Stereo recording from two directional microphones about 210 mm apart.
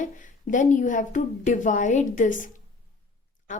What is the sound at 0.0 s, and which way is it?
Speech, 35° left (ahead or behind).